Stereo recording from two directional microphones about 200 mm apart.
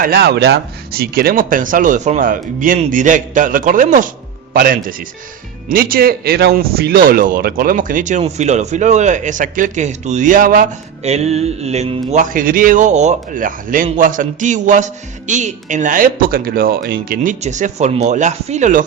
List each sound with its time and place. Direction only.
0.0 s a man's voice: 50° right (ahead or behind)